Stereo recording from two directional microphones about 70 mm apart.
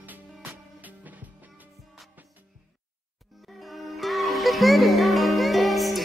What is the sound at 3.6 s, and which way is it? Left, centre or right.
Music, centre.